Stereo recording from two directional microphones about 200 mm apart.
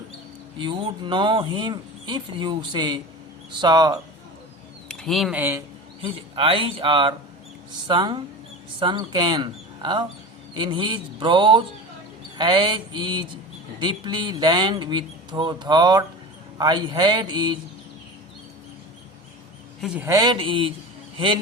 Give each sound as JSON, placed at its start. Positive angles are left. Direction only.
{"t": 0.6, "sound": "speech", "side_deg": -25}
{"t": 4.9, "sound": "speech", "side_deg": 0}
{"t": 6.0, "sound": "speech", "side_deg": -25}
{"t": 19.8, "sound": "a man's voice", "side_deg": -5}
{"t": 20.1, "sound": "speech", "side_deg": -20}